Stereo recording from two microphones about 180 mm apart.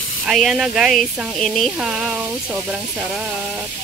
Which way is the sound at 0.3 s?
Centre (ahead or behind).